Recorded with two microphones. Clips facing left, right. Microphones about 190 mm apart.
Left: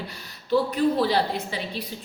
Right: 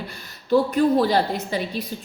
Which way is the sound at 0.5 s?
45° right (ahead or behind).